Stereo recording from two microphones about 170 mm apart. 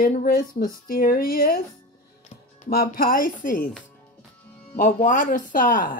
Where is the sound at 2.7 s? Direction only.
60° left (ahead or behind).